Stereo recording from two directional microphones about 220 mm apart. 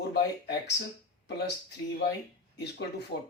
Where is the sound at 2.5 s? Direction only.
50° left (ahead or behind).